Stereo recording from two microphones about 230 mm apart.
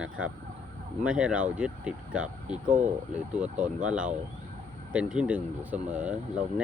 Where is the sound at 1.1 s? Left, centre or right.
Centre.